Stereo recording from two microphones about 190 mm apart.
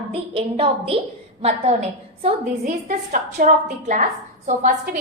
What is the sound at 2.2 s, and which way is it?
A woman's voice, 40° right (ahead or behind).